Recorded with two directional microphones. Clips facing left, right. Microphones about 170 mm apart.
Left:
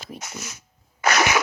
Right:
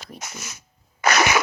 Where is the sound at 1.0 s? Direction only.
70° right (ahead or behind).